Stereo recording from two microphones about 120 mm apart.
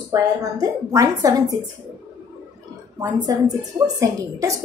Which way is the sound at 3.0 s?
30° right (ahead or behind).